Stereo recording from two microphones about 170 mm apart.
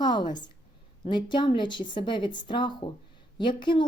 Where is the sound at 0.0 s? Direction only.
25° left (ahead or behind).